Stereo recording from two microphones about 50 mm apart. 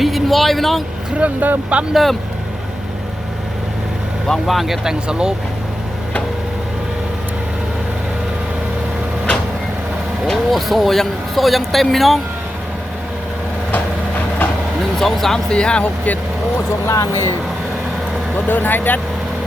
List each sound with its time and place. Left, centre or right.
0.0 s vehicle: centre
1.2 s speech: right
1.9 s speech: centre
4.3 s speech: centre
10.2 s speech: centre
14.9 s speech: centre
15.4 s speech: centre
16.8 s speech: left
18.4 s speech: left